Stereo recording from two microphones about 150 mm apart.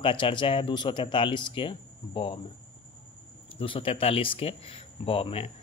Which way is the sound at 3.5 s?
35° left (ahead or behind).